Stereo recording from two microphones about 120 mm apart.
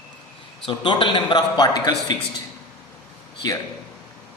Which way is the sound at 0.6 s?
45° left (ahead or behind).